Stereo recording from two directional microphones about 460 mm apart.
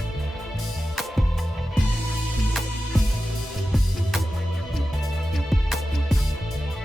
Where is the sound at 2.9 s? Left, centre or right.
Centre.